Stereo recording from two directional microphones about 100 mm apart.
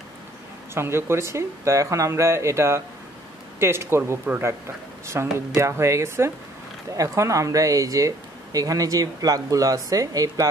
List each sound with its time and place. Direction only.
0.7 s speech: 25° right (ahead or behind)